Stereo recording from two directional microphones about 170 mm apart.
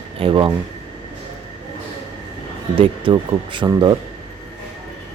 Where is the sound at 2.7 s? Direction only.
30° right (ahead or behind).